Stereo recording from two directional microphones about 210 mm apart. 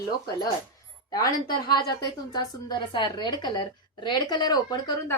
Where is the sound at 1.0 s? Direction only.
20° left (ahead or behind).